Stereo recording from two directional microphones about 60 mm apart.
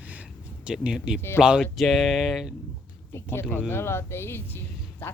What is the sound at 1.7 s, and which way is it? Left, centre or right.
Speech, centre.